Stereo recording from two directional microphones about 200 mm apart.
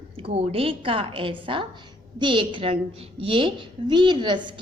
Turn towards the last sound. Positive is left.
turn(degrees=-25)  # may be behind; listen again after turning